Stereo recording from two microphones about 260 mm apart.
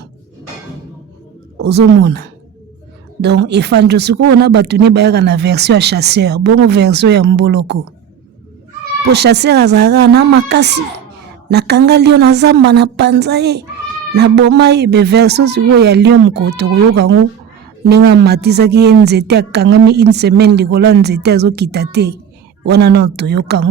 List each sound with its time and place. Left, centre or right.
1.6 s a woman's voice: right
9.1 s a woman's voice: right